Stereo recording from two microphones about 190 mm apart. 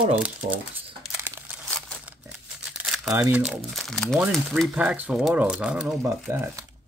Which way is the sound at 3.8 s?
Centre (ahead or behind).